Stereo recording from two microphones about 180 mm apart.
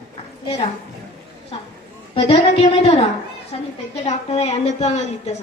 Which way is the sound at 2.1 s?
30° left (ahead or behind).